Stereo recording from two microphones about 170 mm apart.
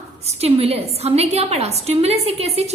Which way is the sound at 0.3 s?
40° right (ahead or behind).